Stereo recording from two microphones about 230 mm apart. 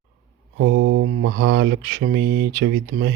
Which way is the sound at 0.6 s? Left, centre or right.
Right.